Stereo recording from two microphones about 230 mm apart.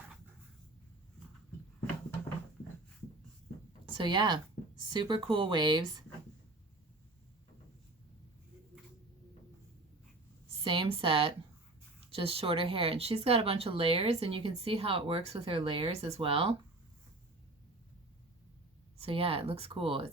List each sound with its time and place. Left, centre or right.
3.9 s speech: centre
10.6 s speech: right
18.9 s speech: right